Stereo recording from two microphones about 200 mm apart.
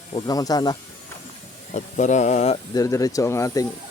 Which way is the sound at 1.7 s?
35° left (ahead or behind).